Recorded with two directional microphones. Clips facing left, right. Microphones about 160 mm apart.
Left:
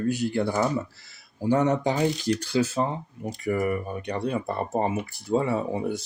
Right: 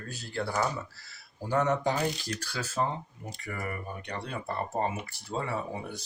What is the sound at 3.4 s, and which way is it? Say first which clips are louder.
Speech: left 13 dB; 30° left (ahead or behind).